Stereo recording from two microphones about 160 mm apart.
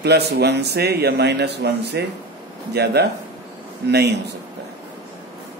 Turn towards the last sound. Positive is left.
turn(degrees=-90)